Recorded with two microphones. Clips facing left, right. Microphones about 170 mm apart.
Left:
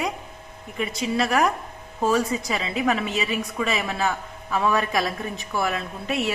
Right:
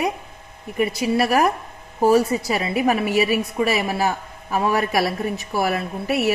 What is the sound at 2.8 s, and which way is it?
Speech, 25° right (ahead or behind).